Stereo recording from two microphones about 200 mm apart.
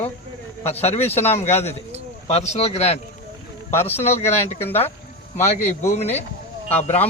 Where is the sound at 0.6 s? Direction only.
30° left (ahead or behind).